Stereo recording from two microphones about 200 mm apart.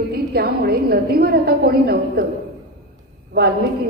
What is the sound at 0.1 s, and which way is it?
A woman's voice, 50° right (ahead or behind).